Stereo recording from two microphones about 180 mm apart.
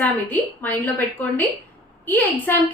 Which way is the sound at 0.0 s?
10° left (ahead or behind).